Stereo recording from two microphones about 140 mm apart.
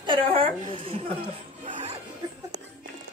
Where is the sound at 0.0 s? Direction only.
40° right (ahead or behind).